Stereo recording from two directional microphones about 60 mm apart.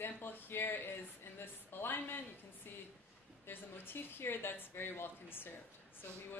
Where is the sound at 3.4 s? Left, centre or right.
Left.